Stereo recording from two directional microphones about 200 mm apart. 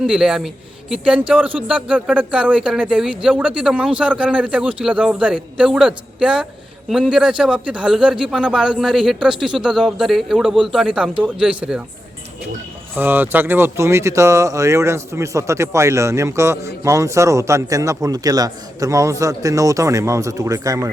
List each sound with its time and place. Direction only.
0.0 s speech: 5° right (ahead or behind)
13.0 s speech: 10° right (ahead or behind)